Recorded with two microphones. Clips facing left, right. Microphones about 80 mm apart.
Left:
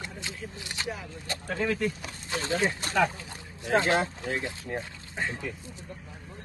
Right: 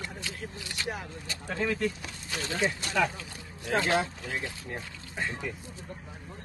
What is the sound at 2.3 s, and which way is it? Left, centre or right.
Speech, left.